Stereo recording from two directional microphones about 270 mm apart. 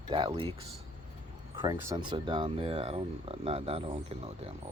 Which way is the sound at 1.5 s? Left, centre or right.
Centre.